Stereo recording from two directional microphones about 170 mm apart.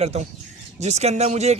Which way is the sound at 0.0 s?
40° right (ahead or behind).